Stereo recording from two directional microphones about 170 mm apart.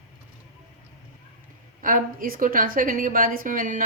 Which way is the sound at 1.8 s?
55° right (ahead or behind).